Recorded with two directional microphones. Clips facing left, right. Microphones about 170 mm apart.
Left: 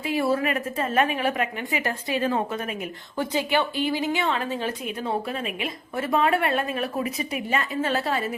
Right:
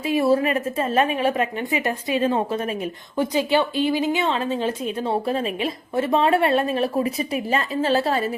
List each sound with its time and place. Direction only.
0.0 s a woman's voice: 25° right (ahead or behind)
3.3 s a woman's voice: 20° right (ahead or behind)